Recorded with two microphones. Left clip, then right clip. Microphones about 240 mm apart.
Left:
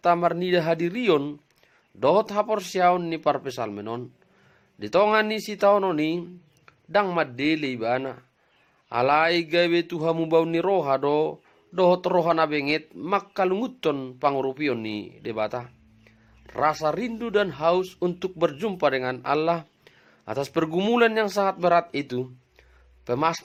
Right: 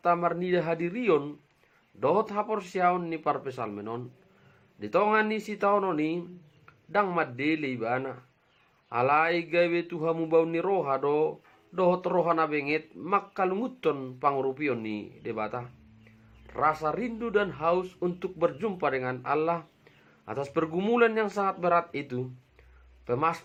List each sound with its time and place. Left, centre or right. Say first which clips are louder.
0.0 s speech: left 5 dB; left